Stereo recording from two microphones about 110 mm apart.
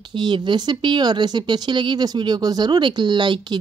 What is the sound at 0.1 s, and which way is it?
Speech, 45° right (ahead or behind).